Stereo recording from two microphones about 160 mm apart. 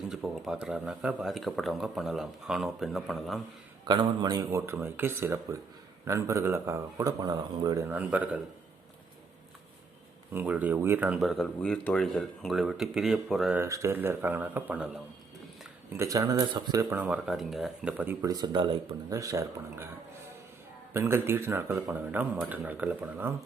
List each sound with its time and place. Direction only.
0.1 s speech: 5° right (ahead or behind)
3.8 s speech: 25° right (ahead or behind); by 8.4 s 10° right (ahead or behind)
10.3 s speech: 10° right (ahead or behind)
13.6 s speech: 20° right (ahead or behind)
16.0 s speech: 20° right (ahead or behind)
16.9 s speech: 10° right (ahead or behind)
18.3 s speech: 25° right (ahead or behind)
19.1 s speech: 20° right (ahead or behind)
20.9 s speech: 15° right (ahead or behind)